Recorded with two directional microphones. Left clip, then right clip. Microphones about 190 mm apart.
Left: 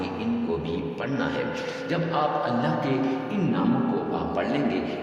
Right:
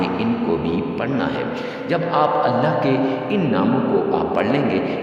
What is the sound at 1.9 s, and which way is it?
Speech, 35° right (ahead or behind).